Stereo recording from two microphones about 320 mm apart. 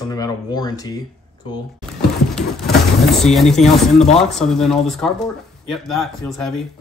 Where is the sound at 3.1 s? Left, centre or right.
Centre.